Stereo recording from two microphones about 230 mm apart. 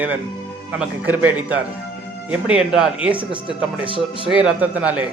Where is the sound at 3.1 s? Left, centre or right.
Right.